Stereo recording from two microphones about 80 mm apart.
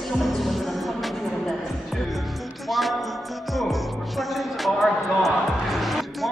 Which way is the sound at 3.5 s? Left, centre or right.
Centre.